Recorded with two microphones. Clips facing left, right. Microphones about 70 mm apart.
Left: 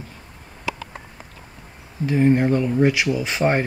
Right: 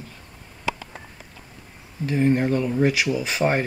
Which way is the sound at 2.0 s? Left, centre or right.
Centre.